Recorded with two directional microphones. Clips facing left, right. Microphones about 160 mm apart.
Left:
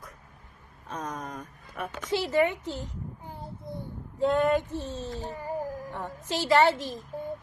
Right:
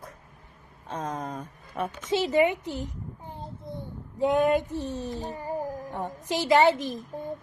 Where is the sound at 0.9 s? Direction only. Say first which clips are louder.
Right 3 dB; 25° right (ahead or behind).